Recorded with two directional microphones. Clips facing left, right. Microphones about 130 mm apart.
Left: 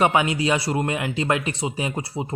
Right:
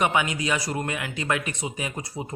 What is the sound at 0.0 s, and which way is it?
A man's voice, 30° left (ahead or behind).